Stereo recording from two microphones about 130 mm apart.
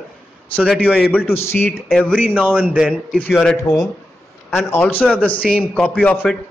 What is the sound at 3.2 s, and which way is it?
Speech, 10° left (ahead or behind).